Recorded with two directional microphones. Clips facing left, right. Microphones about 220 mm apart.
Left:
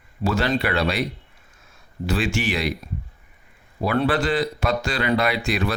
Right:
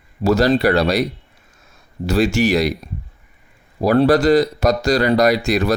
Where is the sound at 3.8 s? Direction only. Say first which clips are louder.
Right 8 dB; 40° right (ahead or behind).